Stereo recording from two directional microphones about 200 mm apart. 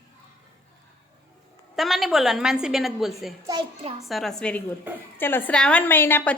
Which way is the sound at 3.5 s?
25° right (ahead or behind).